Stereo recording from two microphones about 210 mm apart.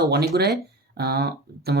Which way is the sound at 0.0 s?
50° right (ahead or behind).